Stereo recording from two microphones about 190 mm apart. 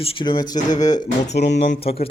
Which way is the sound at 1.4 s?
55° left (ahead or behind).